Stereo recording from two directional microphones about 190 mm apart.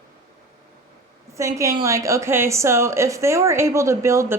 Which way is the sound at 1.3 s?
15° right (ahead or behind).